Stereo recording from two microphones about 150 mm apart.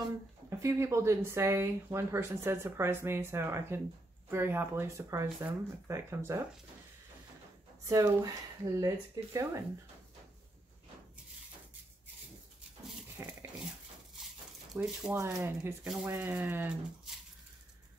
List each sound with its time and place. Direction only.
0.5 s speech: 20° right (ahead or behind)
7.8 s speech: 20° right (ahead or behind)
13.2 s a sound: 15° right (ahead or behind)
14.8 s speech: 5° right (ahead or behind)
15.1 s speech: 15° right (ahead or behind)